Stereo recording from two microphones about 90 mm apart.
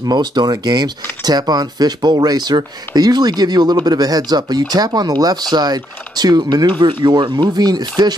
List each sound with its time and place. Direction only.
0.0 s speech: 50° right (ahead or behind)
6.8 s speech: 60° right (ahead or behind)